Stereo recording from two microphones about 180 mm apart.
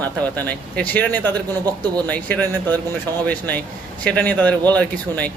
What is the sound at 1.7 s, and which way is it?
Speech, 20° right (ahead or behind).